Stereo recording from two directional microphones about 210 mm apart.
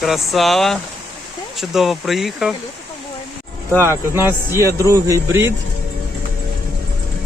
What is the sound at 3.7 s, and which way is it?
Speech, 10° right (ahead or behind).